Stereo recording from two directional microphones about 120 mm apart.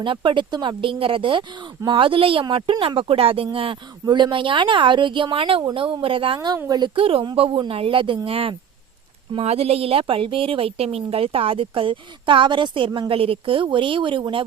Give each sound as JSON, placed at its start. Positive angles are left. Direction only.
{"t": 0.0, "sound": "speech", "side_deg": -45}